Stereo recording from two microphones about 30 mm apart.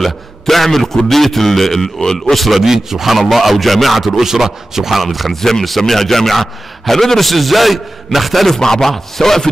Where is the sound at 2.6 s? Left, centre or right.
Centre.